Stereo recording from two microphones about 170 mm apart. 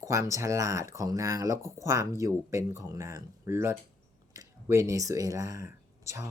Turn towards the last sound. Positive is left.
turn(degrees=-20)  # may be behind; listen again after turning